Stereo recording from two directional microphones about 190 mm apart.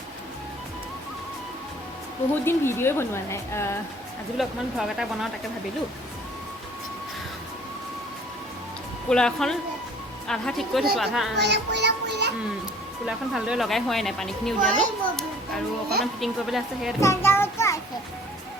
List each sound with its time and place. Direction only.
2.4 s a woman's voice: 10° left (ahead or behind)
4.4 s speech: centre (ahead or behind)
9.0 s speech: 5° left (ahead or behind)
11.3 s children playing: 65° right (ahead or behind)
13.1 s a child's voice: 5° right (ahead or behind)
17.0 s a child's voice: 15° left (ahead or behind)